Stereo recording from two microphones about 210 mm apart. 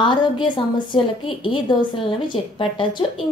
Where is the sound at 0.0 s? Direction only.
20° left (ahead or behind).